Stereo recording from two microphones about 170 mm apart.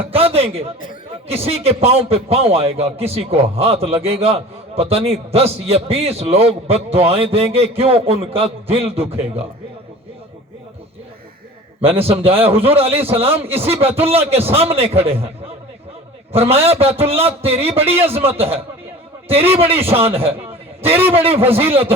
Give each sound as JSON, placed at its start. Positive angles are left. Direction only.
{"t": 0.1, "sound": "a man's voice", "side_deg": -35}
{"t": 11.8, "sound": "a man's voice", "side_deg": -35}
{"t": 16.3, "sound": "a man's voice", "side_deg": -35}